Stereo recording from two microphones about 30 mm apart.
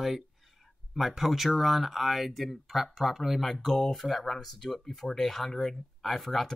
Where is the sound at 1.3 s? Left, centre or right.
Centre.